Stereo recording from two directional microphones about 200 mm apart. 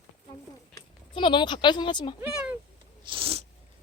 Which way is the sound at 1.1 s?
25° left (ahead or behind).